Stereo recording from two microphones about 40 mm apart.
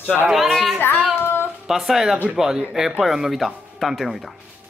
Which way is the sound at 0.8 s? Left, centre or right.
Left.